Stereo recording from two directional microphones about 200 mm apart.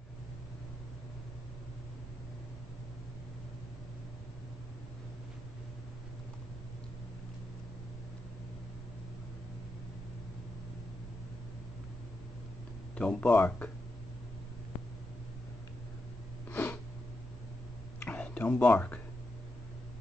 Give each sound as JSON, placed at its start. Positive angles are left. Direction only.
{"t": 12.9, "sound": "speech", "side_deg": 5}
{"t": 16.4, "sound": "a sound", "side_deg": 10}
{"t": 17.9, "sound": "whispering", "side_deg": 10}